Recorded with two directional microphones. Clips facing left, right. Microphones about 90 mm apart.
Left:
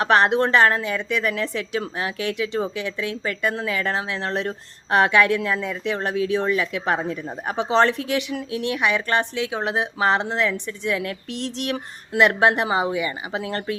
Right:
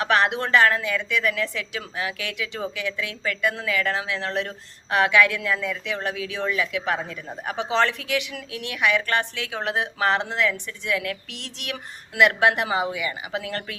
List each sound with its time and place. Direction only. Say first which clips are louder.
0.0 s a woman's voice: left 4 dB; 35° left (ahead or behind)